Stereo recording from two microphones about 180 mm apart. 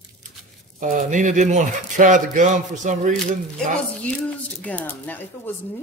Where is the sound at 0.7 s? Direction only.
45° right (ahead or behind).